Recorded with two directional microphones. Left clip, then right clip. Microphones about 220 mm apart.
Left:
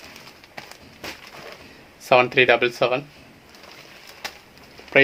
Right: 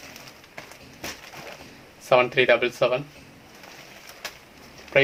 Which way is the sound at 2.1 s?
45° left (ahead or behind).